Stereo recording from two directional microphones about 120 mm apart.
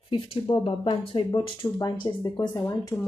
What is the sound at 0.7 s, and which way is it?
Speech, 45° left (ahead or behind).